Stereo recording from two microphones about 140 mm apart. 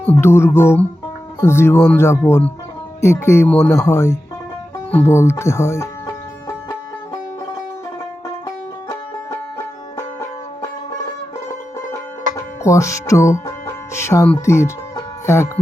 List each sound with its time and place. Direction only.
0.0 s speech: 15° left (ahead or behind)
8.4 s music: 20° left (ahead or behind)
10.0 s banjo: 20° left (ahead or behind)
12.6 s speech: 20° left (ahead or behind)
14.3 s music: 20° left (ahead or behind)